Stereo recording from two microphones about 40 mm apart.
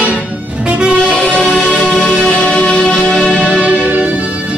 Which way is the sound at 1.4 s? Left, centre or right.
Left.